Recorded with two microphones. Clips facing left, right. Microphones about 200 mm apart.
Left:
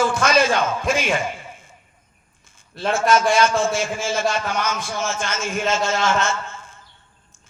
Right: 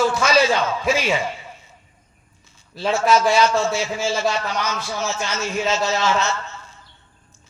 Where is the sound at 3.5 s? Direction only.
50° left (ahead or behind).